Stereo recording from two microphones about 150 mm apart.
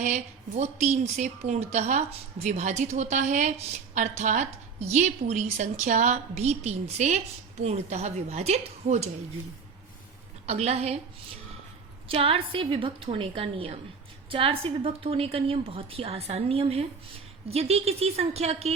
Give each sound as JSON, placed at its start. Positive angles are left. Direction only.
{"t": 0.0, "sound": "a woman's voice", "side_deg": -50}
{"t": 10.4, "sound": "a woman's voice", "side_deg": -45}
{"t": 12.0, "sound": "a woman's voice", "side_deg": -40}